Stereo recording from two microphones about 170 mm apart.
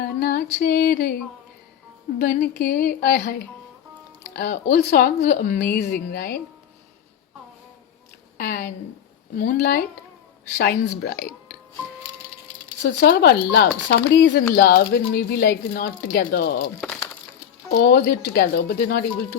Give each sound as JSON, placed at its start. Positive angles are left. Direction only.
{"t": 0.0, "sound": "music", "side_deg": 60}
{"t": 2.1, "sound": "speech", "side_deg": 65}
{"t": 4.4, "sound": "speech", "side_deg": 60}
{"t": 5.7, "sound": "speech", "side_deg": 80}
{"t": 8.4, "sound": "a woman's voice", "side_deg": 65}
{"t": 12.8, "sound": "speech", "side_deg": 90}
{"t": 14.5, "sound": "speech", "side_deg": 70}
{"t": 17.7, "sound": "speech", "side_deg": 75}